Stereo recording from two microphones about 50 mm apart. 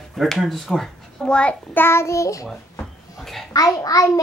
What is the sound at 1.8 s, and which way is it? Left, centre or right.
Child singing, left.